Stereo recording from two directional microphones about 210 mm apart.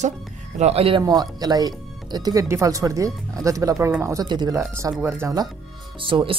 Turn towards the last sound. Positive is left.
turn(degrees=-25)  # may be behind; listen again after turning